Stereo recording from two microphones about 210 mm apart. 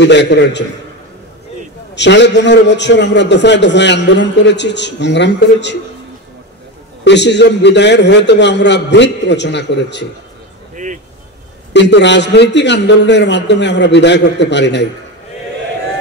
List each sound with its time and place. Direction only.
0.0 s a man's voice: 55° left (ahead or behind)
2.0 s a man's voice: 55° left (ahead or behind)
7.1 s a man's voice: 55° left (ahead or behind)
11.7 s a man's voice: 55° left (ahead or behind)